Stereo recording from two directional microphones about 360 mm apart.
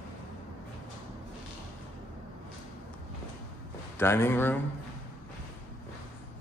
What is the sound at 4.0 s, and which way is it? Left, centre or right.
Speech, centre.